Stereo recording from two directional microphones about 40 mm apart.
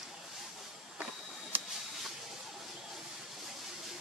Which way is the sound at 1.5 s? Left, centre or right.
Right.